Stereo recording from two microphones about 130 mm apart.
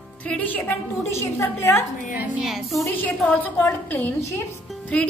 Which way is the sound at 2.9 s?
10° left (ahead or behind).